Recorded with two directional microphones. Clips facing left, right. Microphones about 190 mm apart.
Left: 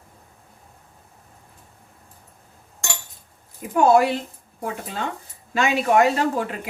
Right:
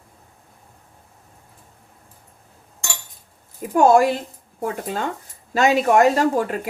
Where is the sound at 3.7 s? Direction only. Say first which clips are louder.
Right 2 dB; 45° right (ahead or behind).